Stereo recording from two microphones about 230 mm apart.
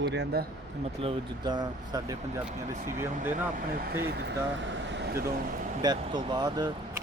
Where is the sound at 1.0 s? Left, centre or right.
Right.